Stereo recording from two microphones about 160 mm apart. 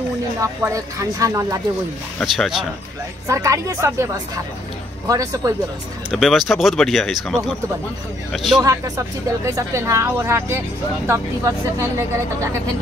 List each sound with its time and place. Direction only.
0.4 s speech: 20° right (ahead or behind)
2.1 s speech: centre (ahead or behind)
3.3 s speech: 20° right (ahead or behind)
6.0 s speech: centre (ahead or behind)
8.6 s speech: 20° right (ahead or behind)